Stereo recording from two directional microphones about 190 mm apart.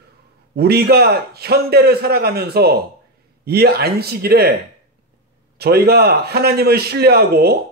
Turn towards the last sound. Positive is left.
turn(degrees=-55)  # may be behind; listen again after turning